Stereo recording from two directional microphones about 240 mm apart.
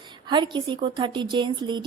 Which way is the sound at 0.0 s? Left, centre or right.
Centre.